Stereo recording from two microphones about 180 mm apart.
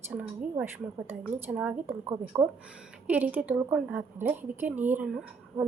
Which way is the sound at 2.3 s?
20° right (ahead or behind).